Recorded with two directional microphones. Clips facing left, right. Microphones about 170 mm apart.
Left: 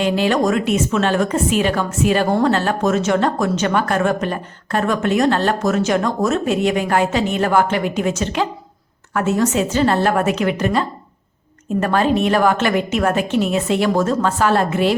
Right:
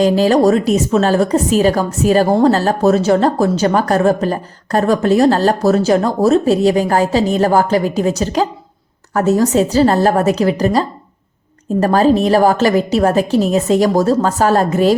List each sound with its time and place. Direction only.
0.0 s a woman's voice: 35° right (ahead or behind)